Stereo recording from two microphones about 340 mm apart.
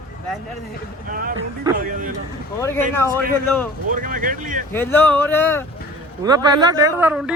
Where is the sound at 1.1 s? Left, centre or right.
Right.